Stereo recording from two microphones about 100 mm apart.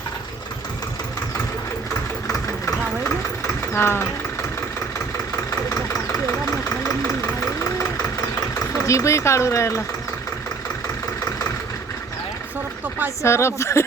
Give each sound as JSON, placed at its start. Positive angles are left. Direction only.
{"t": 2.2, "sound": "engine", "side_deg": 35}
{"t": 3.7, "sound": "speech", "side_deg": 25}
{"t": 8.8, "sound": "speech", "side_deg": 30}
{"t": 13.2, "sound": "speech", "side_deg": 25}